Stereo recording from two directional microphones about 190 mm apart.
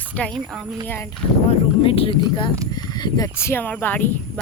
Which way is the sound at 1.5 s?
30° left (ahead or behind).